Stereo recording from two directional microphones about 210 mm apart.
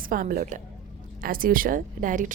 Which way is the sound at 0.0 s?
40° right (ahead or behind).